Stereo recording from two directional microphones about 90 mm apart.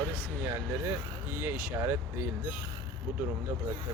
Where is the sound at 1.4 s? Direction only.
20° right (ahead or behind).